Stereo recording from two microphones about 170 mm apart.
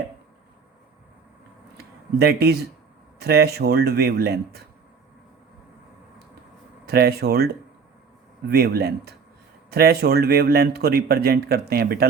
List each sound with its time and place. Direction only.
2.1 s speech: 70° right (ahead or behind)
6.8 s speech: 65° right (ahead or behind)